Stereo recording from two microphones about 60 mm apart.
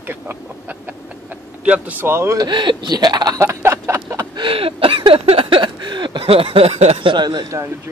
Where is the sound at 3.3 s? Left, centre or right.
Right.